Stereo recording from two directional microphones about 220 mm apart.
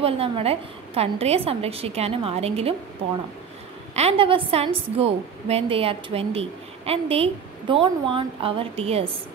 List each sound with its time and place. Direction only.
0.0 s a woman's voice: 25° right (ahead or behind)
3.9 s a woman's voice: 25° right (ahead or behind)